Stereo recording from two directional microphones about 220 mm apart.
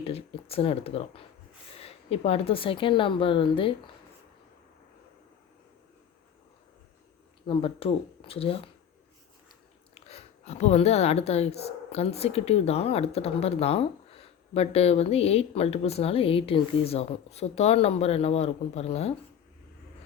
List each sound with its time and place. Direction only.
0.0 s speech: 25° left (ahead or behind)
7.4 s speech: 25° left (ahead or behind)
9.9 s speech: 30° left (ahead or behind)